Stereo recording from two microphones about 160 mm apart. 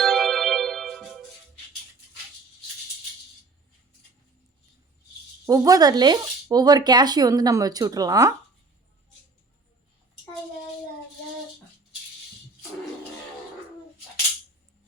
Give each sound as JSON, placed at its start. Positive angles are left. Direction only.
{"t": 0.0, "sound": "music", "side_deg": 0}
{"t": 5.5, "sound": "speech", "side_deg": -25}